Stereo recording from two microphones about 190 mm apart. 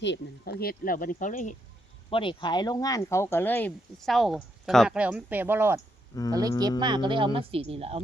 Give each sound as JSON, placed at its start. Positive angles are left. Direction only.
{"t": 0.0, "sound": "speech", "side_deg": 60}
{"t": 2.0, "sound": "speech", "side_deg": 25}
{"t": 6.1, "sound": "speech", "side_deg": 15}
{"t": 6.6, "sound": "speech", "side_deg": -20}